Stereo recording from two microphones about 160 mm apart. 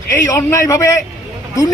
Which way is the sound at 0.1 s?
20° left (ahead or behind).